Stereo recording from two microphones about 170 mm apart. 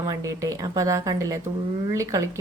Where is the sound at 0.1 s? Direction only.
20° right (ahead or behind).